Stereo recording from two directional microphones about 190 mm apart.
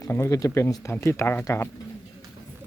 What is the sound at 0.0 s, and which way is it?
Speech, 15° left (ahead or behind).